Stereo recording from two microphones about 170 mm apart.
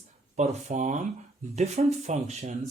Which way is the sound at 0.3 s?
45° right (ahead or behind).